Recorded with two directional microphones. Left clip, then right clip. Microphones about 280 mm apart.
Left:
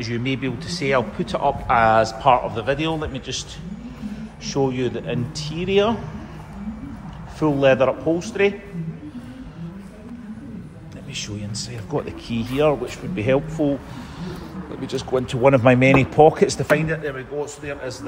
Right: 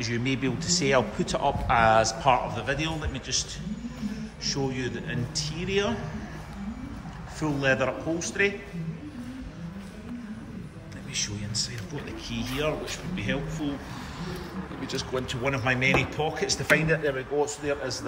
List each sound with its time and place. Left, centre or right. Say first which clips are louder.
0.0 s a man's voice: left 3 dB; centre
4.6 s speech: left 8 dB; centre
7.6 s a man's voice: left 9 dB; centre
11.1 s a man's voice: even; centre
14.9 s speech: left 8 dB; centre
16.6 s a man's voice: left 3 dB; centre